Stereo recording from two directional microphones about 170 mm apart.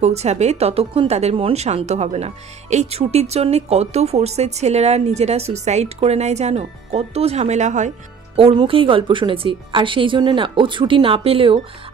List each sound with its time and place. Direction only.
0.0 s a woman's voice: 40° right (ahead or behind)
8.4 s a woman's voice: 35° right (ahead or behind)